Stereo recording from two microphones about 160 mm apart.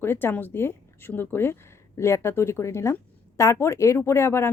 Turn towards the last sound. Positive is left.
turn(degrees=15)  # may be behind; listen again after turning